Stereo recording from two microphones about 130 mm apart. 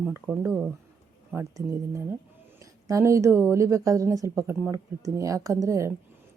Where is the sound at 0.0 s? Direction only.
15° right (ahead or behind).